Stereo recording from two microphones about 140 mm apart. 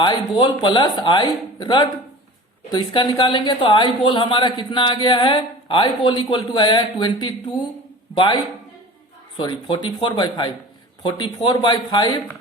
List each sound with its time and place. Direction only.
0.0 s a man's voice: 30° left (ahead or behind)
9.4 s speech: 35° left (ahead or behind)